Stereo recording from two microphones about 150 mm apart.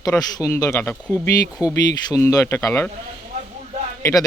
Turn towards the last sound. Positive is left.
turn(degrees=20)  # may be behind; listen again after turning